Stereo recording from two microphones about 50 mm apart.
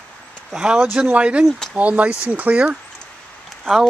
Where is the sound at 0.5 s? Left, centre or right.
Centre.